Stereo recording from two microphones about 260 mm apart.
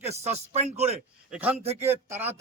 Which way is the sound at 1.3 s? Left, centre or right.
Centre.